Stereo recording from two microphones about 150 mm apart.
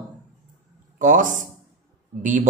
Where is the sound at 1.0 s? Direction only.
60° right (ahead or behind).